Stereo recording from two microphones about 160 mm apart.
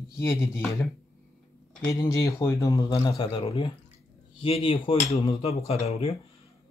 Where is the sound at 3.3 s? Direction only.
35° left (ahead or behind).